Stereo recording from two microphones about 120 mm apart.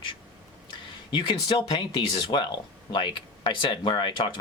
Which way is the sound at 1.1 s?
45° left (ahead or behind).